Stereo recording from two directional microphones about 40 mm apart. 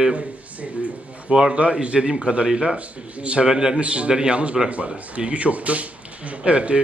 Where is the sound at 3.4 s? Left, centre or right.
Centre.